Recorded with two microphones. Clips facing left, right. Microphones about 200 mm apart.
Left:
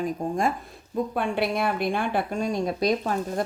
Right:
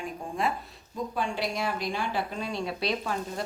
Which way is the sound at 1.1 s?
60° left (ahead or behind).